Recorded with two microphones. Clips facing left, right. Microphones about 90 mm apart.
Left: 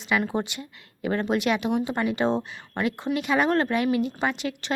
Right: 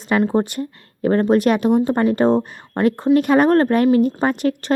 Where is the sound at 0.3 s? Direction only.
45° right (ahead or behind).